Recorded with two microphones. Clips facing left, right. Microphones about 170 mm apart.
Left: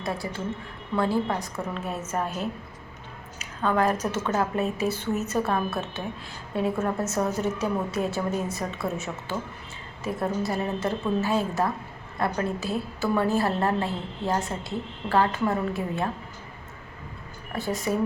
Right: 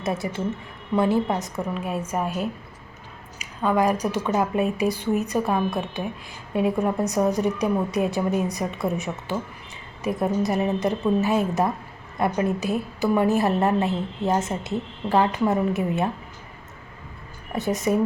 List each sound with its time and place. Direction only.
0.0 s a woman's voice: 20° right (ahead or behind)
17.5 s a woman's voice: 20° right (ahead or behind)